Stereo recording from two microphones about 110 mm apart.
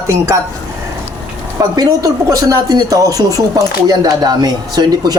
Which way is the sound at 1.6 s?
30° right (ahead or behind).